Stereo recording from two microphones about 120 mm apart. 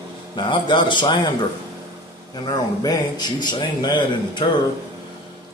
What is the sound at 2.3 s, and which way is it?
A man's voice, 35° left (ahead or behind).